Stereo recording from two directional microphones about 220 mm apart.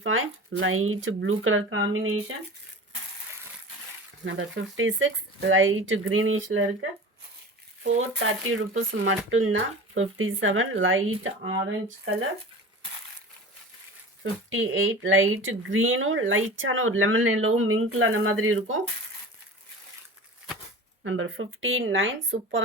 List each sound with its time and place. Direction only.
0.0 s speech: 65° right (ahead or behind)
4.2 s speech: 55° right (ahead or behind)
7.9 s speech: 65° right (ahead or behind)
14.5 s speech: 60° right (ahead or behind)
21.0 s speech: 65° right (ahead or behind)